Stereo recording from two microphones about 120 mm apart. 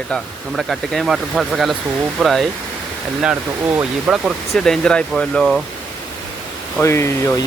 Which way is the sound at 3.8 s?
10° right (ahead or behind).